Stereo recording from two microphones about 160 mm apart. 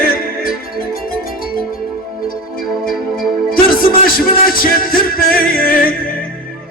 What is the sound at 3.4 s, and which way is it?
Music, 65° left (ahead or behind).